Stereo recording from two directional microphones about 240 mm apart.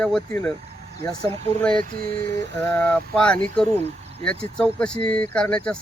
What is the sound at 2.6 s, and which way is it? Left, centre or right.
Speech, centre.